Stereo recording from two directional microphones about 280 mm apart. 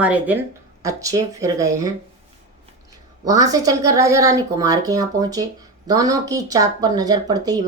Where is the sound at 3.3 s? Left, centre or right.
Centre.